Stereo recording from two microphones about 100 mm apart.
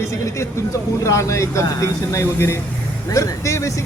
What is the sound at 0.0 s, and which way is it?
Speech, 30° left (ahead or behind).